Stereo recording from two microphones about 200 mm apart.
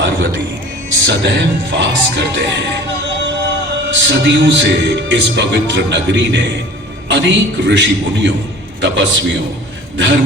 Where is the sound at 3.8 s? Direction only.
65° right (ahead or behind).